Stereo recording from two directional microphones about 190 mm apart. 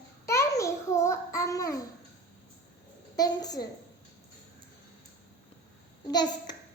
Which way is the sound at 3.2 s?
20° left (ahead or behind).